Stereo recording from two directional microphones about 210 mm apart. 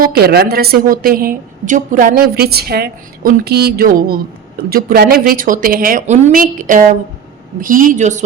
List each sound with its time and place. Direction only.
0.0 s a woman's voice: 45° right (ahead or behind)